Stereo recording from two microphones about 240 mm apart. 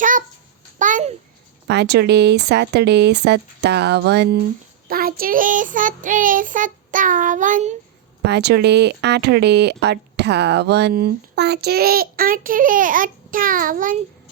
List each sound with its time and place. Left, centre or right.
0.0 s babbling: right
1.6 s speech: right
4.9 s child singing: right
8.2 s speech: right